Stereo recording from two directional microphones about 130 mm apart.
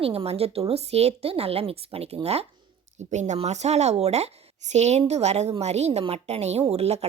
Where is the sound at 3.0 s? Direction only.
65° right (ahead or behind).